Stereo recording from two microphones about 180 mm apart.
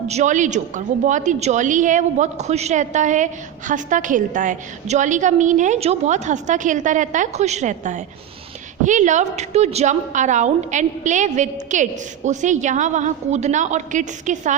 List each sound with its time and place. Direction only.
0.1 s a woman's voice: 40° right (ahead or behind)